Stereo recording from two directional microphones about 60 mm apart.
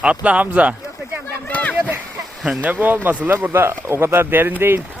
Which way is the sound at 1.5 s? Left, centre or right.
Left.